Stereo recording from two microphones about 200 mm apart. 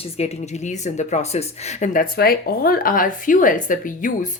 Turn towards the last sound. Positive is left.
turn(degrees=40)  # may be behind; listen again after turning